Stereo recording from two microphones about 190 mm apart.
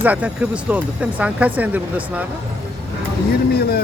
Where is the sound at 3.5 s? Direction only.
55° left (ahead or behind).